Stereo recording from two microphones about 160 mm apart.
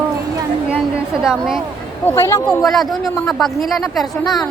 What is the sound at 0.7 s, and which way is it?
Speech, 5° right (ahead or behind).